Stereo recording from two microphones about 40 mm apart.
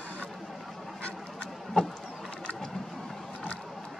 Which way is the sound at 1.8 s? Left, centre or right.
Left.